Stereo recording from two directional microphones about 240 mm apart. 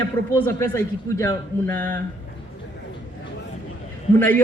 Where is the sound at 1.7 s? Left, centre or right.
Right.